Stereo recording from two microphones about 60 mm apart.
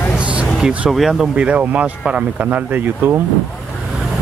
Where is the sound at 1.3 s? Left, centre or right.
Right.